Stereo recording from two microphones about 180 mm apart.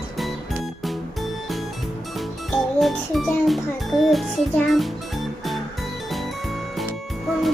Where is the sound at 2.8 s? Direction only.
Centre (ahead or behind).